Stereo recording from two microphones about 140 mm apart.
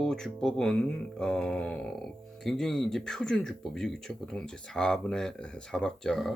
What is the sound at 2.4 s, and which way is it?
Speech, 5° left (ahead or behind).